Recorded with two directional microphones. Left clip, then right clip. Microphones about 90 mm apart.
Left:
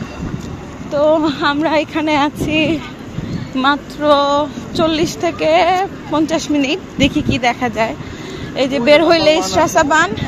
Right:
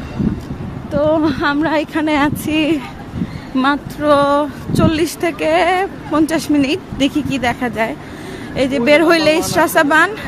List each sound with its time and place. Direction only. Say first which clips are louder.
0.9 s speech: left 2 dB; 35° right (ahead or behind)
1.2 s speech: even; 50° right (ahead or behind)
1.6 s speech: left 1 dB; 30° right (ahead or behind)
2.1 s speech: left 2 dB; 55° right (ahead or behind)
3.6 s speech: left 2 dB; 45° right (ahead or behind)
4.2 s a sound: right 1 dB; 75° right (ahead or behind)
4.8 s speech: left 1 dB; 50° right (ahead or behind)
5.4 s speech: left 2 dB; 35° right (ahead or behind)
6.1 s speech: right 1 dB; 55° right (ahead or behind)
7.0 s speech: left 3 dB; 30° right (ahead or behind)
8.5 s speech: left 1 dB; 45° right (ahead or behind)
9.1 s a woman's voice: left 1 dB; 60° right (ahead or behind)
9.8 s speech: right 2 dB; 80° right